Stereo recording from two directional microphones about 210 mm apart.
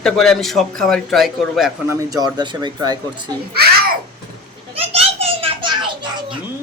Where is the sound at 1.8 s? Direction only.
15° right (ahead or behind).